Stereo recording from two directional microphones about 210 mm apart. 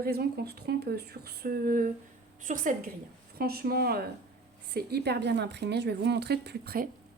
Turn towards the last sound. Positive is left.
turn(degrees=-50)  # may be behind; listen again after turning